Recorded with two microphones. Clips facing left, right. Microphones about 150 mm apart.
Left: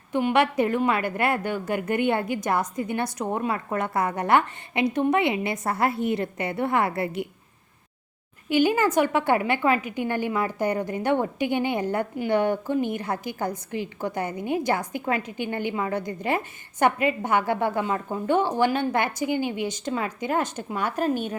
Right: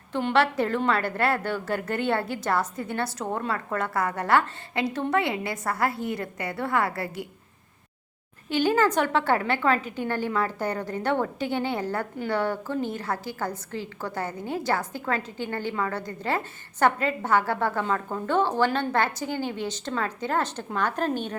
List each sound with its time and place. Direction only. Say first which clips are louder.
0.1 s a woman's voice: left 2 dB; 10° left (ahead or behind)
8.4 s a woman's voice: left 1 dB; 10° left (ahead or behind)